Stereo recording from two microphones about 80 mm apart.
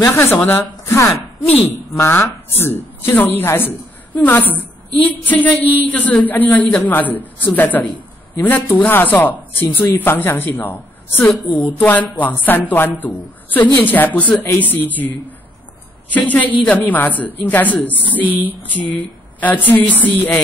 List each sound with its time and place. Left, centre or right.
0.0 s a woman's voice: left
0.9 s speech: left
2.0 s a woman's voice: left
18.2 s a sound: right
18.5 s a woman's voice: left